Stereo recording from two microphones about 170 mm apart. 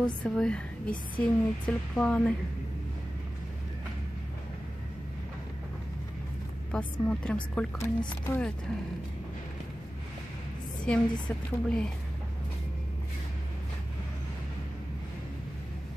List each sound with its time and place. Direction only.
0.0 s speech: 5° left (ahead or behind)
6.7 s speech: 5° left (ahead or behind)
7.8 s speech: 15° left (ahead or behind)
10.9 s a woman's voice: 5° left (ahead or behind)